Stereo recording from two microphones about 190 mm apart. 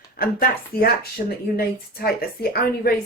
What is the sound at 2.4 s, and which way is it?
Speech, 55° left (ahead or behind).